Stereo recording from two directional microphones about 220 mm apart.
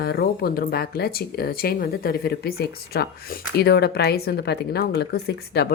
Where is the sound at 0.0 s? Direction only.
45° left (ahead or behind).